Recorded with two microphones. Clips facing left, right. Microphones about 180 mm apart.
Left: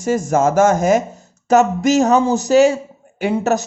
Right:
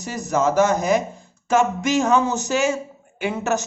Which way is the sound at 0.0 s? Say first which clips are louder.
Left 6 dB; 50° left (ahead or behind).